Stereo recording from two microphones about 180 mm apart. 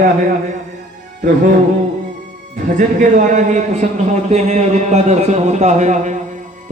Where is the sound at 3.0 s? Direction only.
45° right (ahead or behind).